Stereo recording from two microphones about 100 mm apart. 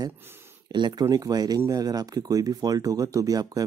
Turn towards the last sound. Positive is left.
turn(degrees=-40)  # may be behind; listen again after turning